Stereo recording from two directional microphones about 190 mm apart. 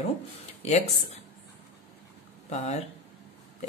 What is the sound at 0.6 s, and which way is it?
Speech, 35° left (ahead or behind).